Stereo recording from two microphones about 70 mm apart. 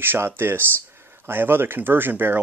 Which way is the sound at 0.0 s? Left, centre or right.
Right.